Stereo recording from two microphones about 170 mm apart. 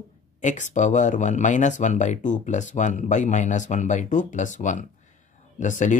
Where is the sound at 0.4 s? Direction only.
45° left (ahead or behind).